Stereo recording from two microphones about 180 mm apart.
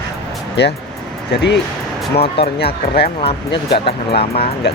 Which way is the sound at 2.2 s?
65° left (ahead or behind).